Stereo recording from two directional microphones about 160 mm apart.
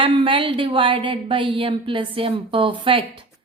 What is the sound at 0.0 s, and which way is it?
Speech, 30° right (ahead or behind).